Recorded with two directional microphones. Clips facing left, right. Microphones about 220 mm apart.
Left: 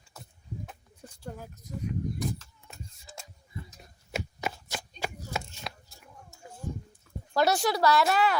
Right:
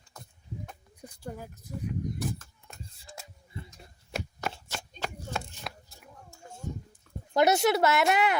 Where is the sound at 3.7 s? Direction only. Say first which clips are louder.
Left 1 dB; 5° left (ahead or behind).